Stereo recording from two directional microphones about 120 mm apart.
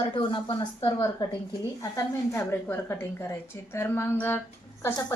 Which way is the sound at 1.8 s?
30° left (ahead or behind).